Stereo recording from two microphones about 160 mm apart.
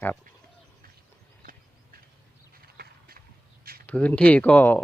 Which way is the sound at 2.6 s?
80° right.